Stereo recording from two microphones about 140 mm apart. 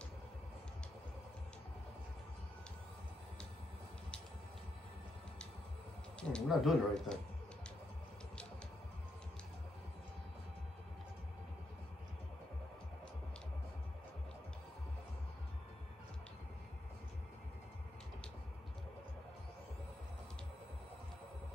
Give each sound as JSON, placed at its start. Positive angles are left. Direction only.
{"t": 6.1, "sound": "speech", "side_deg": 5}